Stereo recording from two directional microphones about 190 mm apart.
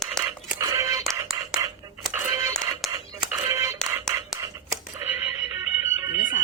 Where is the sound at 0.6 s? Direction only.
15° right (ahead or behind).